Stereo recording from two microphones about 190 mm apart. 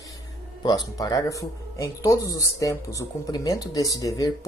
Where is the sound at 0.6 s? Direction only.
20° left (ahead or behind).